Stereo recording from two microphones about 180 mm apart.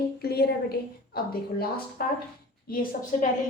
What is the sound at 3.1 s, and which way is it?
Speech, 45° left (ahead or behind).